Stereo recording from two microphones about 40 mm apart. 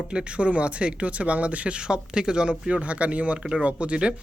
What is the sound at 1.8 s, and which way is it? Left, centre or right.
Speech, centre.